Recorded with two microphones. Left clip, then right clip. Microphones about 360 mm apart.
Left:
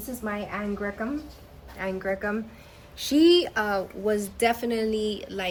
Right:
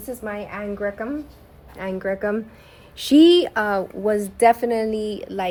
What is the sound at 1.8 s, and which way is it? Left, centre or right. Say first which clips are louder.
A woman's voice: right 4 dB; right.